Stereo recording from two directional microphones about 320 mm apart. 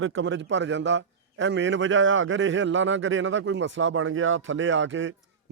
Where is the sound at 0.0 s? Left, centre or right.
Right.